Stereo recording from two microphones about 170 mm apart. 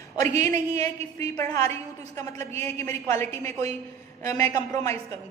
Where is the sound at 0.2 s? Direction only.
15° left (ahead or behind).